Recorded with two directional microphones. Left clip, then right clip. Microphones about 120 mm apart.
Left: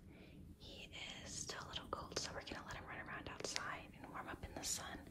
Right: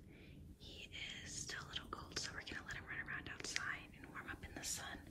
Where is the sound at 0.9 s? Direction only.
35° left (ahead or behind).